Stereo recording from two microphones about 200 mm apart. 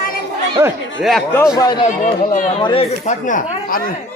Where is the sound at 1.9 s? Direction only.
40° left (ahead or behind).